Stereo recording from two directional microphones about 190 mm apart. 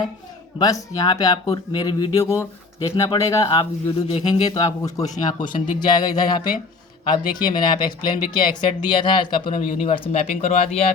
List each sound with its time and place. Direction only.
0.6 s speech: 20° left (ahead or behind)